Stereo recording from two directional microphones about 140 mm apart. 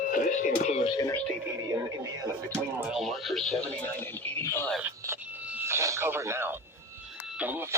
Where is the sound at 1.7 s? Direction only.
25° right (ahead or behind).